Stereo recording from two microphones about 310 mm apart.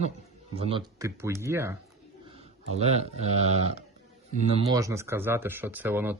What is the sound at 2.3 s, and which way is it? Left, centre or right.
Speech, centre.